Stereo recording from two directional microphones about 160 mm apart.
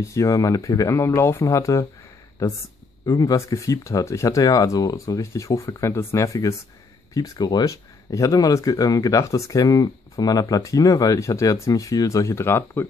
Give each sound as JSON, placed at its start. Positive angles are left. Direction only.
{"t": 0.0, "sound": "speech", "side_deg": 20}
{"t": 3.1, "sound": "speech", "side_deg": 20}